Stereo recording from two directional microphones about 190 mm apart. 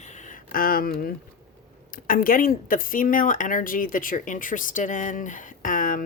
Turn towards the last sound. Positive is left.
turn(degrees=45)  # may be behind; listen again after turning